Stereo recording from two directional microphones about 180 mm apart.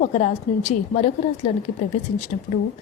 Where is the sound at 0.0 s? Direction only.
40° left (ahead or behind).